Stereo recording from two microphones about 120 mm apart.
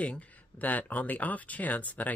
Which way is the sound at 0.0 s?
10° left (ahead or behind).